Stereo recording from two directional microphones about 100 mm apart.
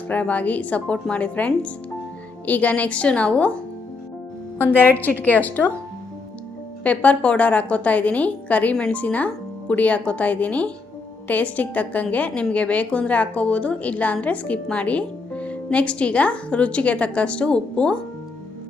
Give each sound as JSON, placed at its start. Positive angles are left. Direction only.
{"t": 0.1, "sound": "a woman's voice", "side_deg": 15}
{"t": 4.5, "sound": "a woman's voice", "side_deg": 20}
{"t": 6.8, "sound": "a woman's voice", "side_deg": 15}